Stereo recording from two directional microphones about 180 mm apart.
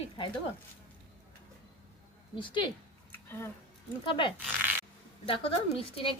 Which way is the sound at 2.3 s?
25° left (ahead or behind).